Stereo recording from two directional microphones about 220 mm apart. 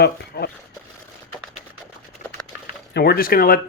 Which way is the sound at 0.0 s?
45° left (ahead or behind).